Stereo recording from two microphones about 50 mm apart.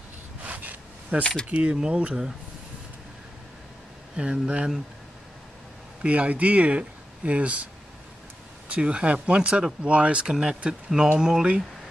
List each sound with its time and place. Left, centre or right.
0.4 s a sound: right
1.2 s speech: centre
1.5 s speech: right
4.2 s speech: right
6.0 s speech: right
8.6 s speech: right